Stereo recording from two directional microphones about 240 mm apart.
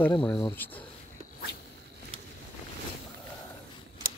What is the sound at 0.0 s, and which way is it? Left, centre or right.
Speech, centre.